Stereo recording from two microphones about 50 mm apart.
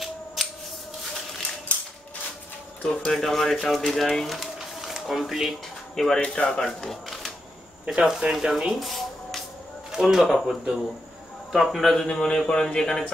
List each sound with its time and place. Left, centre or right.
2.8 s speech: left
3.1 s speech: centre
4.6 s a sound: centre
5.9 s speech: centre
6.9 s a sound: centre
7.8 s speech: right
8.1 s speech: centre
8.7 s music: centre
9.8 s speech: centre